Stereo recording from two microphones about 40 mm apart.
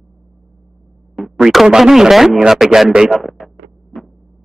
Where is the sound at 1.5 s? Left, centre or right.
Centre.